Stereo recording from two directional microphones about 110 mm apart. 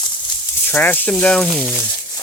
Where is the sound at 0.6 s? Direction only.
15° left (ahead or behind).